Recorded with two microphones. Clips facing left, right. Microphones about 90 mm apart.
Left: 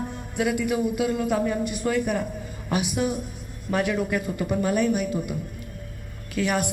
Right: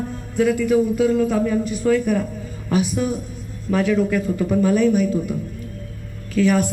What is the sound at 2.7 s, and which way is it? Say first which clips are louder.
Speech: right 6 dB; 65° left (ahead or behind).